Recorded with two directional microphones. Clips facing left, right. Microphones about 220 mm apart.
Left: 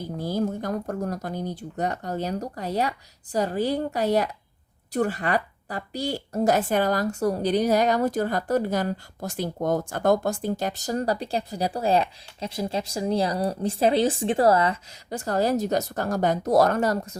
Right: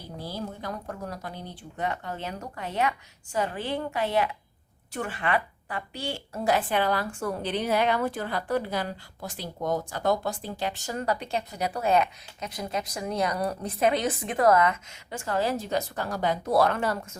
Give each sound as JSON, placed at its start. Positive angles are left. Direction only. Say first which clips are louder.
{"t": 0.2, "sound": "a woman's voice", "louder": "left 9 dB", "side_deg": 45}